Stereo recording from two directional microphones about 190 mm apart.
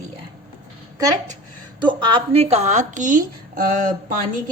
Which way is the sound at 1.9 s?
25° right (ahead or behind).